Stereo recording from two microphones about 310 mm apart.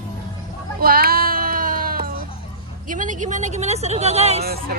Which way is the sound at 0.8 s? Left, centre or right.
Right.